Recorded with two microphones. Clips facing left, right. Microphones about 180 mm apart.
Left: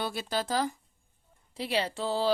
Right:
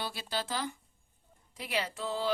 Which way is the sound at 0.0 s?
50° left (ahead or behind).